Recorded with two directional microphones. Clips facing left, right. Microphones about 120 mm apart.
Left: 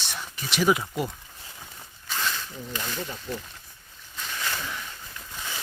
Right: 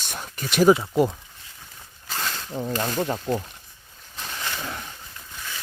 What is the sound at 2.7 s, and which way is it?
Speech, 45° right (ahead or behind).